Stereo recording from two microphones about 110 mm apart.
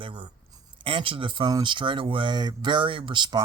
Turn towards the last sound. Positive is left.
turn(degrees=-45)  # may be behind; listen again after turning